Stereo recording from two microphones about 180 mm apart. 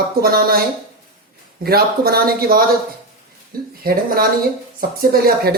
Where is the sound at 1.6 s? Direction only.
60° right (ahead or behind).